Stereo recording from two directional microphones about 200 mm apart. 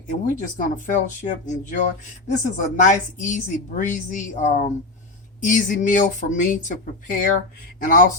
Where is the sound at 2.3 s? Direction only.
40° left (ahead or behind).